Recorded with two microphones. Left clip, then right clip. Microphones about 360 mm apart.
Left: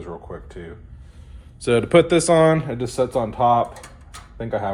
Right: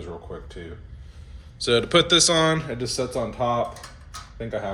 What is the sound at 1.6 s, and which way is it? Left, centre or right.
Speech, centre.